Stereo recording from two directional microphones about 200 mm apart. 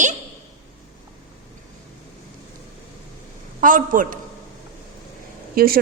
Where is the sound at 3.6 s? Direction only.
40° right (ahead or behind).